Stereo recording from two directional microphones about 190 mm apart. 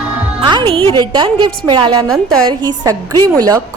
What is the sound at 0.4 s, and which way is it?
A woman's voice, 25° right (ahead or behind).